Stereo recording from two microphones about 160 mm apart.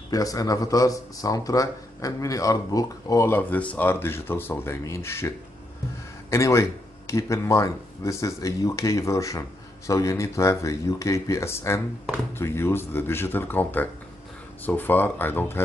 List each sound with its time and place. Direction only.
0.1 s speech: 20° left (ahead or behind)
6.3 s speech: 20° left (ahead or behind)